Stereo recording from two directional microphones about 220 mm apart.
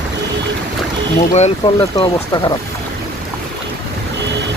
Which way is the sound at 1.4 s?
20° left (ahead or behind).